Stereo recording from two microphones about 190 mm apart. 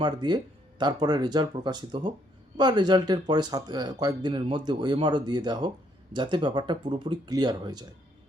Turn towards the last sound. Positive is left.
turn(degrees=-20)  # may be behind; listen again after turning